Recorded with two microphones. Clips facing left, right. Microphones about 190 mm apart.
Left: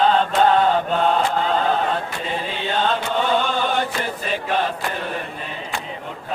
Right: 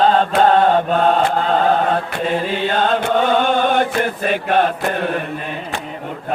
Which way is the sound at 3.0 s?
55° right (ahead or behind).